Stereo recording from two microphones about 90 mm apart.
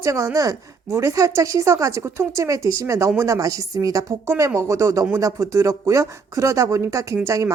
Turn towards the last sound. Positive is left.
turn(degrees=-35)  # may be behind; listen again after turning